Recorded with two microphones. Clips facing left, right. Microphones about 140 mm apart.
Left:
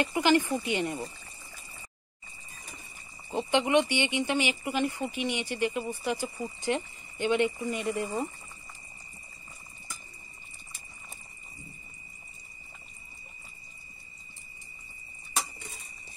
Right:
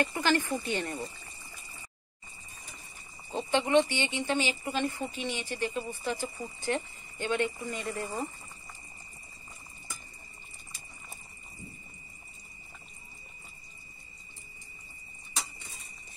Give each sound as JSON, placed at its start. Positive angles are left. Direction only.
{"t": 0.0, "sound": "speech", "side_deg": 15}
{"t": 3.3, "sound": "speech", "side_deg": 15}